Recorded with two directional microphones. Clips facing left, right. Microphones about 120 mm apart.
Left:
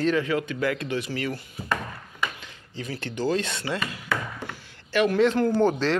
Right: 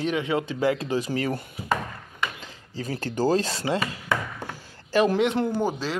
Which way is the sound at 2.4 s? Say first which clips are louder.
Right 2 dB; 35° right (ahead or behind).